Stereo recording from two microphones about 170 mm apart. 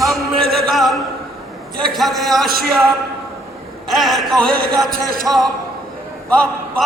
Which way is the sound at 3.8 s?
Centre (ahead or behind).